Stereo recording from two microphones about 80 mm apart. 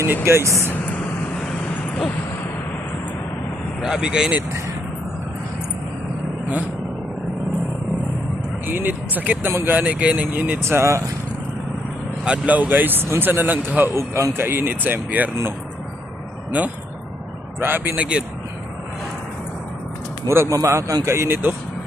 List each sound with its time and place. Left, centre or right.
0.3 s speech: right
0.7 s vehicle: centre
3.8 s speech: centre
8.6 s speech: right
9.5 s speech: right
9.7 s speech: centre
10.4 s speech: right
12.2 s speech: centre; by 14.3 s right
14.3 s speech: right
16.5 s speech: centre
20.2 s a man's voice: right